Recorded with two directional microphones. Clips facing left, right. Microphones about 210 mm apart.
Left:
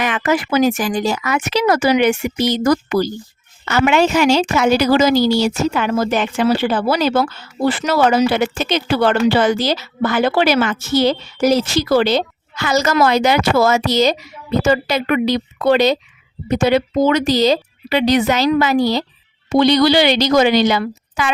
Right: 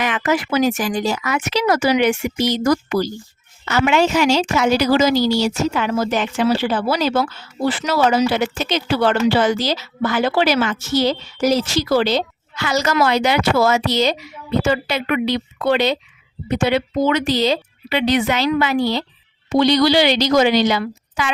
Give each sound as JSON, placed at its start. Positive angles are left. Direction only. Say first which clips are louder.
{"t": 0.0, "sound": "a woman's voice", "louder": "left 2 dB", "side_deg": 50}
{"t": 19.5, "sound": "a woman's voice", "louder": "left 2 dB", "side_deg": 60}